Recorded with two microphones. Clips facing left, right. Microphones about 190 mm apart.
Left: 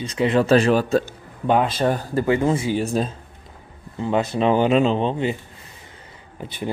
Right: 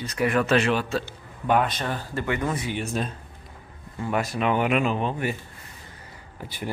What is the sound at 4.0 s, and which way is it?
A man's voice, 25° left (ahead or behind).